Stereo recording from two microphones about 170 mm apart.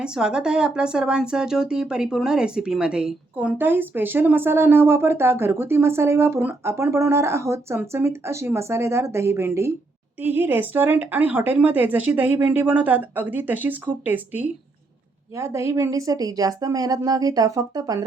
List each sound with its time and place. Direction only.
0.0 s a woman's voice: 5° right (ahead or behind); by 18.0 s 20° right (ahead or behind)